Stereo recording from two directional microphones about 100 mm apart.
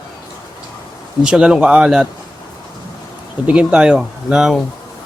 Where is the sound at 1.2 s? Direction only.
10° right (ahead or behind).